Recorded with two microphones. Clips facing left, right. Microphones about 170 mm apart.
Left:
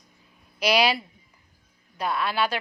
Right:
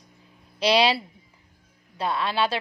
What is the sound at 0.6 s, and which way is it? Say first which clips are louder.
A woman's voice: right 2 dB; 30° right (ahead or behind).